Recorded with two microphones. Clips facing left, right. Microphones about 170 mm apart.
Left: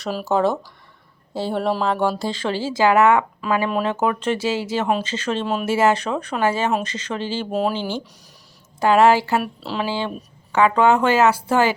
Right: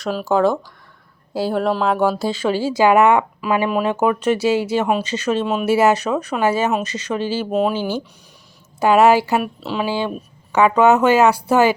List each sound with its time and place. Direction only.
0.0 s speech: centre (ahead or behind); by 3.7 s 20° right (ahead or behind)
3.7 s speech: 10° right (ahead or behind)